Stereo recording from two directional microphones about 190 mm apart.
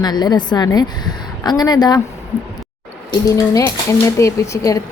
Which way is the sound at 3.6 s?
15° left (ahead or behind).